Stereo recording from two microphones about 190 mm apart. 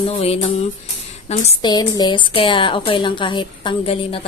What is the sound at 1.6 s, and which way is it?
A woman's voice, 20° left (ahead or behind).